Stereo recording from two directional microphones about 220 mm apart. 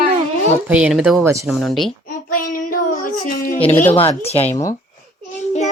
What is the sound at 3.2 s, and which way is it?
Speech, 35° left (ahead or behind).